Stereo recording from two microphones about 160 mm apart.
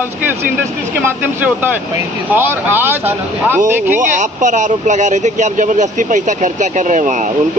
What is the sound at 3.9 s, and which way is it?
Speech, 50° right (ahead or behind).